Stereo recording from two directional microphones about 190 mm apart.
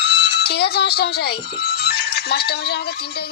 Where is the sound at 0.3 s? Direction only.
60° left (ahead or behind).